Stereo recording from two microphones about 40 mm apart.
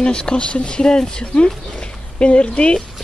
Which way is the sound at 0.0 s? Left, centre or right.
Left.